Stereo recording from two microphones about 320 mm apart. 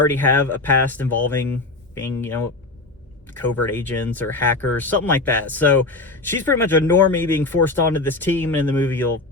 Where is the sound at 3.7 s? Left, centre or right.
Centre.